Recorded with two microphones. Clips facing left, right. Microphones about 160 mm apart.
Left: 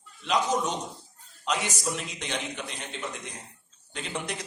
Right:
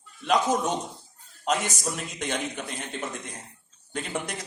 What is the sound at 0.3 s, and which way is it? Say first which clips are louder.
A man's voice: right 3 dB; 50° right (ahead or behind).